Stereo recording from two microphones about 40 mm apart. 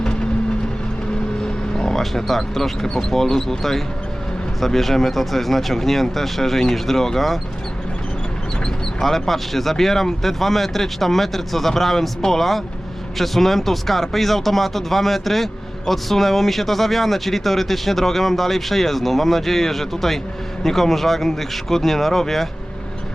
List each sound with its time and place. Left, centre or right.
1.7 s vehicle: centre
2.0 s speech: centre
9.0 s speech: centre